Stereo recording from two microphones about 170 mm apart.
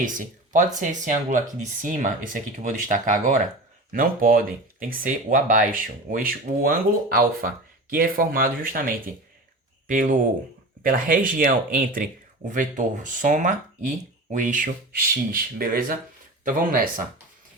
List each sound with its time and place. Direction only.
0.0 s speech: 50° right (ahead or behind)